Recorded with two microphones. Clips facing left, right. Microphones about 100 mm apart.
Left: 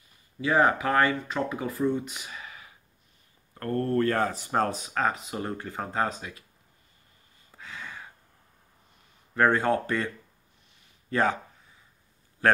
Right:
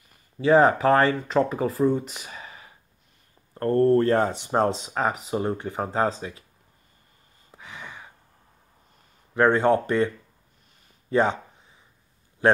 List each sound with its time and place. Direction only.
0.4 s speech: 35° right (ahead or behind)
7.5 s a sound: 15° right (ahead or behind)
9.3 s speech: 20° right (ahead or behind)
11.1 s speech: 20° right (ahead or behind)
12.4 s speech: 20° right (ahead or behind)